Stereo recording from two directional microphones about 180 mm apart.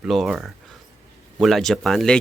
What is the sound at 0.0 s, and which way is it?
Speech, centre (ahead or behind).